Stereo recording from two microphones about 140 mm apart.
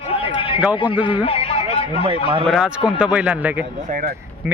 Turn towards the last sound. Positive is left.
turn(degrees=-10)  # may be behind; listen again after turning